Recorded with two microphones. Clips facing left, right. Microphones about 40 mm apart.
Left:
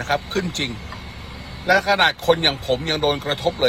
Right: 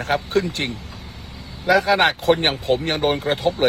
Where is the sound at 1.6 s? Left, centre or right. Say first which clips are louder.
Even; left.